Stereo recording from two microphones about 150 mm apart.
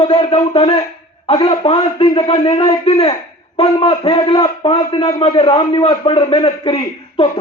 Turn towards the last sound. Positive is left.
turn(degrees=40)  # may be behind; listen again after turning